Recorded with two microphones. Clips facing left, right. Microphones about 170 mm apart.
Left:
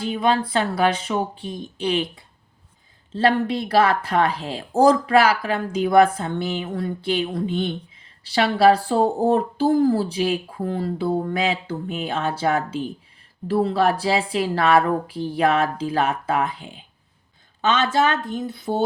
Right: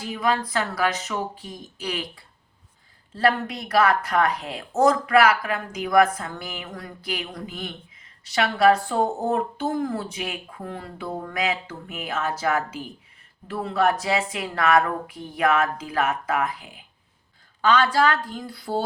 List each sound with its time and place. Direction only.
0.0 s speech: 25° left (ahead or behind)